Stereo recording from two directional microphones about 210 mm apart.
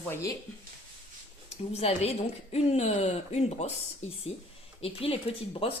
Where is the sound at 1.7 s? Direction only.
30° left (ahead or behind).